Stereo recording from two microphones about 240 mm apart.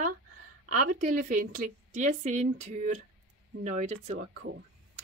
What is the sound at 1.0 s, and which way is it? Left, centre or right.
A woman's voice, right.